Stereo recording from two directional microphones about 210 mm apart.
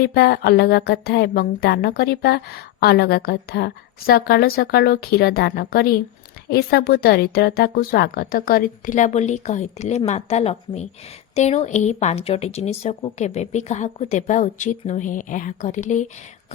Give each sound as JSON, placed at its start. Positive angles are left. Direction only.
{"t": 0.0, "sound": "speech", "side_deg": 50}